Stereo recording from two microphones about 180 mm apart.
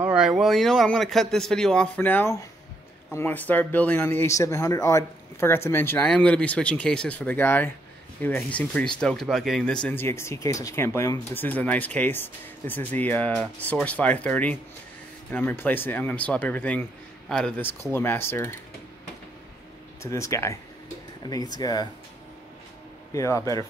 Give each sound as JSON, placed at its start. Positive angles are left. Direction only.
{"t": 0.0, "sound": "speech", "side_deg": -5}
{"t": 20.0, "sound": "speech", "side_deg": 15}
{"t": 23.1, "sound": "speech", "side_deg": 15}